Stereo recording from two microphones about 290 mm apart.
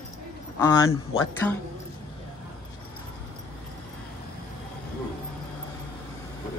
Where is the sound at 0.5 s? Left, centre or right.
Centre.